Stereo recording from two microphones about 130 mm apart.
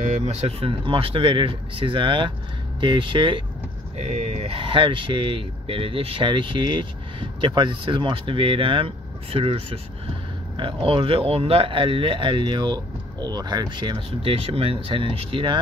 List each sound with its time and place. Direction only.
0.0 s speech: 60° right (ahead or behind); by 3.4 s 40° right (ahead or behind)
3.9 s speech: 55° right (ahead or behind)